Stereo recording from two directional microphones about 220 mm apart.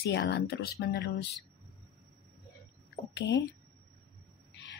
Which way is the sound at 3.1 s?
50° left (ahead or behind).